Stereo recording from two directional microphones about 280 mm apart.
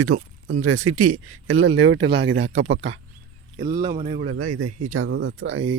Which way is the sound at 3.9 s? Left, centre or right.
Right.